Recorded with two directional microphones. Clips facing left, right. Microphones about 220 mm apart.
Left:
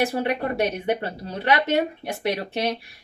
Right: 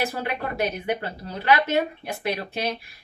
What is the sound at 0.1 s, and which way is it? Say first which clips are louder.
Speech: left 5 dB; 25° left (ahead or behind).